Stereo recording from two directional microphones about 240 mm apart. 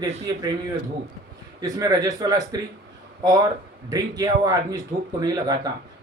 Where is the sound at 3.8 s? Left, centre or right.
Centre.